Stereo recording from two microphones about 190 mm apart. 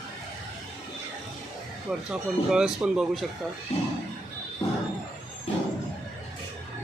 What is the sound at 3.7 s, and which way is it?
Speech, 35° left (ahead or behind).